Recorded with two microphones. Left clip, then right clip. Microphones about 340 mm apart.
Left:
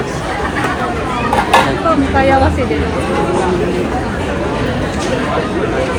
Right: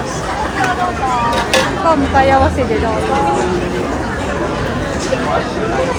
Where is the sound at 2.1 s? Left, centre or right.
Right.